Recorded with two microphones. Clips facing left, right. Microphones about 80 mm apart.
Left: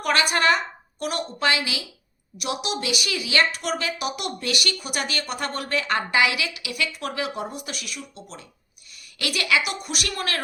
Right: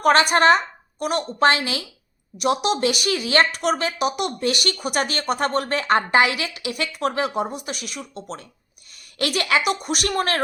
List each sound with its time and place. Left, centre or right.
0.0 s a woman's voice: right
1.4 s a woman's voice: right